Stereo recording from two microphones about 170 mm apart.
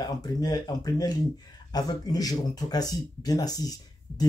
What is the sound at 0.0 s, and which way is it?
Speech, 25° left (ahead or behind).